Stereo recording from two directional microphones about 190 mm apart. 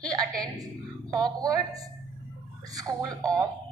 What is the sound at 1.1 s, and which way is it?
A woman's voice, 20° right (ahead or behind).